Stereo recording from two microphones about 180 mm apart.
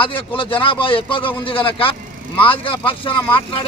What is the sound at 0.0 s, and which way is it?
A man's voice, 30° left (ahead or behind).